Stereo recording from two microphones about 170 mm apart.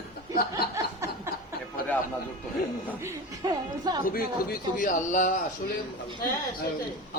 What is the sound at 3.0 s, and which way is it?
Speech, 25° right (ahead or behind).